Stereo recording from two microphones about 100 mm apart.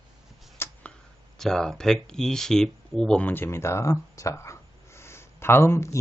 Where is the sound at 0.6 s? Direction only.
25° left (ahead or behind).